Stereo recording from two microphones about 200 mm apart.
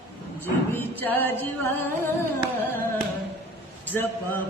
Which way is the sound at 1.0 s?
10° left (ahead or behind).